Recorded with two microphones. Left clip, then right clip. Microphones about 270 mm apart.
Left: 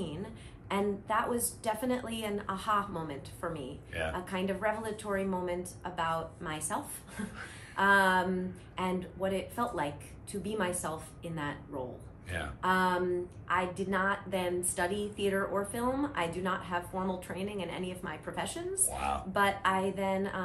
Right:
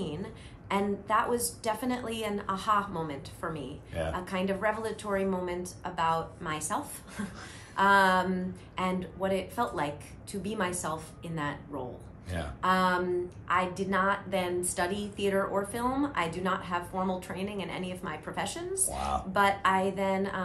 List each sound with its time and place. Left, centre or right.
0.0 s a woman's voice: centre